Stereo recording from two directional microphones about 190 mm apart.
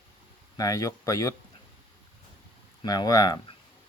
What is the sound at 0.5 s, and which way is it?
Speech, 20° left (ahead or behind).